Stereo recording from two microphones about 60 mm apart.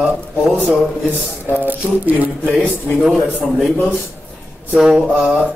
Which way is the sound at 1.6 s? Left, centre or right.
Right.